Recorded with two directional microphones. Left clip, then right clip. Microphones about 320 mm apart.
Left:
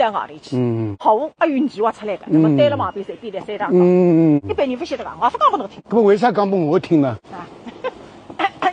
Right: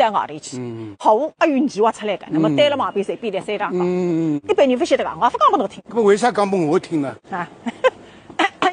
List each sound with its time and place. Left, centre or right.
0.0 s speech: right
3.7 s speech: left
4.5 s speech: right
5.9 s speech: left
7.3 s a sound: right